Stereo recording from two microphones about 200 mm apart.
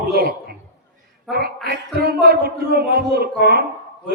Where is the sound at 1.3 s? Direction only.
50° right (ahead or behind).